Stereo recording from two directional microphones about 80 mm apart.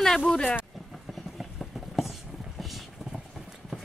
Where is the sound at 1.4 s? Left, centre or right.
Centre.